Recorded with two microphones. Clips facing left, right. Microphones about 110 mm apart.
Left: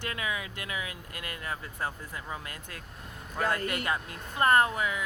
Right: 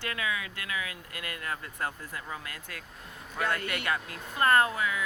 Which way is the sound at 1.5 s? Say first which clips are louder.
Even; 15° left (ahead or behind).